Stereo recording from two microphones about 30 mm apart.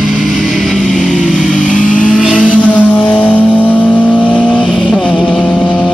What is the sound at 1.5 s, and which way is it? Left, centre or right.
Vehicle, left.